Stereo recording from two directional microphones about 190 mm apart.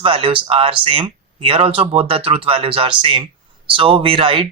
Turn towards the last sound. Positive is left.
turn(degrees=-30)  # may be behind; listen again after turning